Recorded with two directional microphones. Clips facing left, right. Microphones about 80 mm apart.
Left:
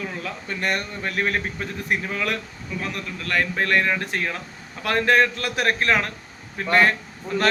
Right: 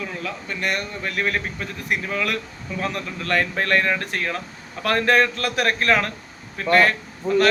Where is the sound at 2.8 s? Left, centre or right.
Centre.